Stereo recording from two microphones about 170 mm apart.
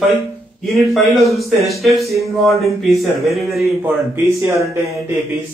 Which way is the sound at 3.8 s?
15° right (ahead or behind).